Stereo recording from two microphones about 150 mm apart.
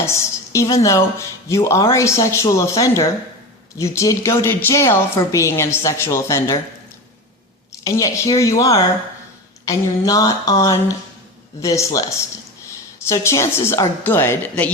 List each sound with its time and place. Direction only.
0.0 s speech: 20° left (ahead or behind)
7.7 s speech: 20° left (ahead or behind)
12.6 s a sound: 20° left (ahead or behind)
13.7 s a woman's voice: 15° left (ahead or behind)